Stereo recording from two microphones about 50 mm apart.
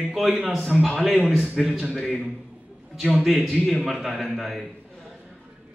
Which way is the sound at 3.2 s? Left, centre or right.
Centre.